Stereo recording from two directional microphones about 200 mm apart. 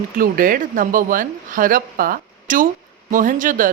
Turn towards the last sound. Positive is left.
turn(degrees=-40)  # may be behind; listen again after turning